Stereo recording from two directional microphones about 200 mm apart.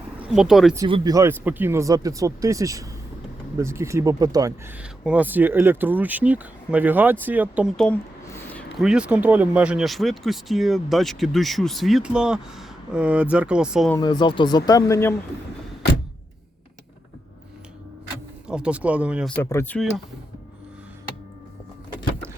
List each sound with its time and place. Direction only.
0.2 s speech: 5° right (ahead or behind)
0.8 s speech: 25° right (ahead or behind)
4.8 s speech: 5° right (ahead or behind)
7.8 s speech: 5° left (ahead or behind)
14.0 s speech: 20° left (ahead or behind)
18.4 s speech: 5° right (ahead or behind)
19.4 s speech: 10° left (ahead or behind)